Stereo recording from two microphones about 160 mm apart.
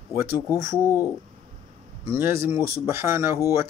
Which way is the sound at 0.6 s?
15° right (ahead or behind).